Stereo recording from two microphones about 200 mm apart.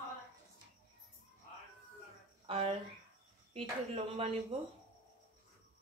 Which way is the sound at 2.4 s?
25° right (ahead or behind).